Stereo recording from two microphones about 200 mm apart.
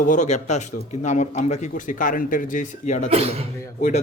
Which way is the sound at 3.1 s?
30° right (ahead or behind).